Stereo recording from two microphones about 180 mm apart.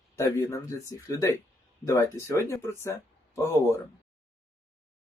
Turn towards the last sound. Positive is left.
turn(degrees=15)  # may be behind; listen again after turning